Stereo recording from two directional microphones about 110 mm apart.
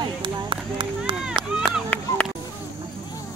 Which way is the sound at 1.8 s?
15° left (ahead or behind).